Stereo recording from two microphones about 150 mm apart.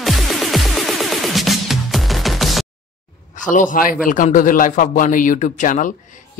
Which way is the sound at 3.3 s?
60° left (ahead or behind).